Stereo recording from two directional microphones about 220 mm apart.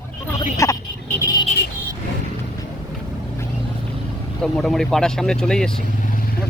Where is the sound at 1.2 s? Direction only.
15° left (ahead or behind).